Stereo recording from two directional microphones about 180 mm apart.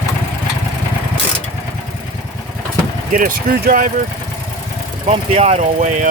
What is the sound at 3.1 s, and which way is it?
Speech, 50° right (ahead or behind).